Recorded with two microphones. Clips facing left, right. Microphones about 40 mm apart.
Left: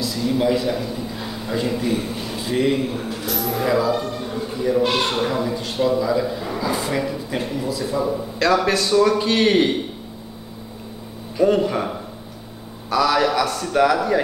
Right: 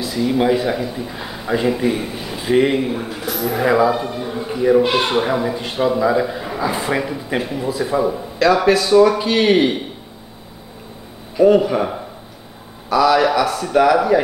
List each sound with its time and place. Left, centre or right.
0.0 s a man's voice: centre
7.3 s a man's voice: centre
7.6 s speech: right
8.4 s a man's voice: centre
11.4 s a man's voice: centre
12.9 s a man's voice: centre